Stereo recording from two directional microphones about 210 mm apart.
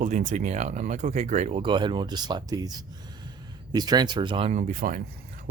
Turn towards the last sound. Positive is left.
turn(degrees=-40)  # may be behind; listen again after turning